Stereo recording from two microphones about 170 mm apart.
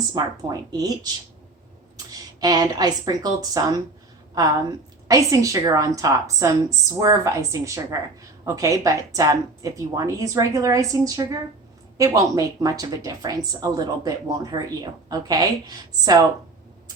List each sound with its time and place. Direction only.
0.1 s a woman's voice: 25° right (ahead or behind)
2.4 s a woman's voice: 20° right (ahead or behind)
5.0 s a woman's voice: 20° right (ahead or behind)